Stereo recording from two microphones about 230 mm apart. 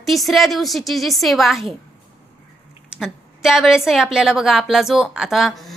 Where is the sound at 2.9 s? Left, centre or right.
Centre.